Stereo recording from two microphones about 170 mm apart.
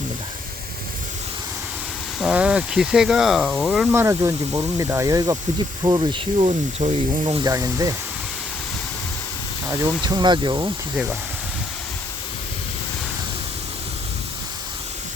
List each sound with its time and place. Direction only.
2.1 s speech: 5° right (ahead or behind)
3.9 s speech: 15° right (ahead or behind)
9.8 s speech: 25° right (ahead or behind)
10.9 s speech: 5° right (ahead or behind)